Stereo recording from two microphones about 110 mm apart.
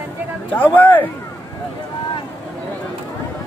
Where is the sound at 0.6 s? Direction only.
15° left (ahead or behind).